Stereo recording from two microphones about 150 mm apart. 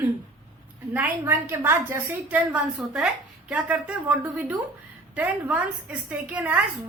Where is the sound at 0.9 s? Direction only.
15° right (ahead or behind).